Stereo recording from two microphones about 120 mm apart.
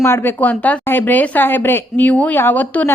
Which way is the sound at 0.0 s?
20° left (ahead or behind).